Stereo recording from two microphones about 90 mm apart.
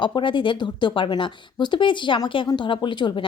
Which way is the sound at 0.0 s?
60° left (ahead or behind).